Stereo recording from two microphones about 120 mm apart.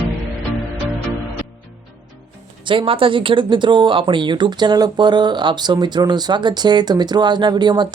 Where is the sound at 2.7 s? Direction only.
45° right (ahead or behind).